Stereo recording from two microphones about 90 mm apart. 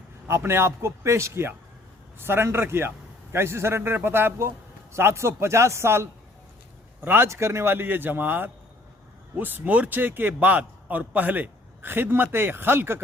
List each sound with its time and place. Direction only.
0.3 s speech: 30° right (ahead or behind)